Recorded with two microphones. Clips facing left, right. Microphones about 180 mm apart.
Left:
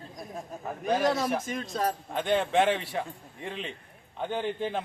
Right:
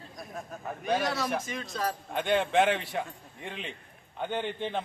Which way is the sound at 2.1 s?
Centre (ahead or behind).